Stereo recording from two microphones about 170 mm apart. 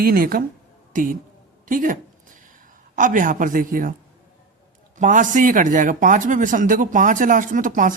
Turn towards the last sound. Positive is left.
turn(degrees=-50)  # may be behind; listen again after turning